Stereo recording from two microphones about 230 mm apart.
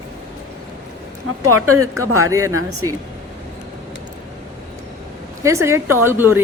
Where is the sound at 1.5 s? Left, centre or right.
Right.